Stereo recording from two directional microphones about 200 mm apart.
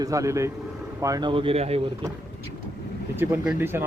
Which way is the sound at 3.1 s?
5° right (ahead or behind).